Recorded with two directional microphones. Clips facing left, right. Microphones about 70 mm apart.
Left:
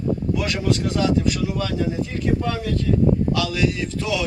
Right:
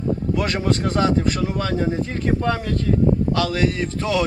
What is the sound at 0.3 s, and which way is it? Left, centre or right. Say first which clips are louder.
Speech: right 1 dB; right.